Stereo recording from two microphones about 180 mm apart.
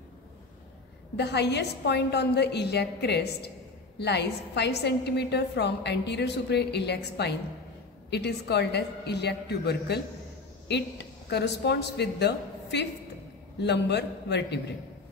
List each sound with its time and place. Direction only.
1.1 s a woman's voice: 70° left (ahead or behind)